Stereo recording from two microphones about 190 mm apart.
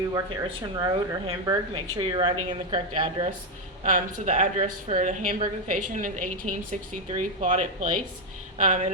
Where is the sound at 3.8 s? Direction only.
40° right (ahead or behind).